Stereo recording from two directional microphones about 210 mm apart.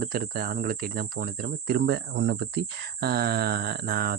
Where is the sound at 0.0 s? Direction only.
45° right (ahead or behind).